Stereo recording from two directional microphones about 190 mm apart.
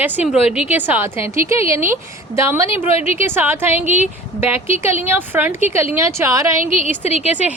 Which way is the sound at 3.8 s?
40° right (ahead or behind).